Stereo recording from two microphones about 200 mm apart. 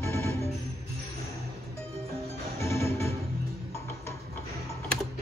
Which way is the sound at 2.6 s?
15° left (ahead or behind).